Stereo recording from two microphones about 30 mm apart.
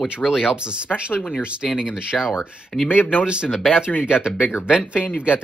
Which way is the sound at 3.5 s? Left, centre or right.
Centre.